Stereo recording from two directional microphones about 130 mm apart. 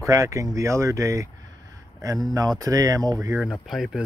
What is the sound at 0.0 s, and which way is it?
Speech, 25° right (ahead or behind).